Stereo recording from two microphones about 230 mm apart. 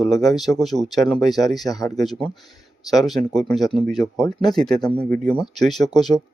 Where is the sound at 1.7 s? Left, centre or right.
Centre.